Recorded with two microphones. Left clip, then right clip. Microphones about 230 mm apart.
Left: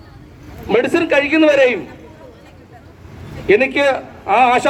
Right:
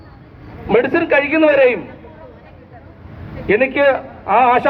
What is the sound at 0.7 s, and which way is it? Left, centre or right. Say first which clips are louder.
A man's voice: right 1 dB; left.